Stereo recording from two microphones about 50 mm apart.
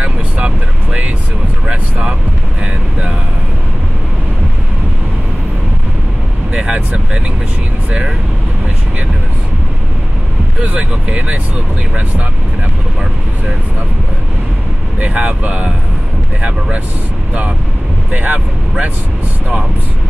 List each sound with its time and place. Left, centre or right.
1.7 s vehicle: centre
6.5 s vehicle: right
10.6 s a sound: right
15.0 s speech: right
18.1 s speech: right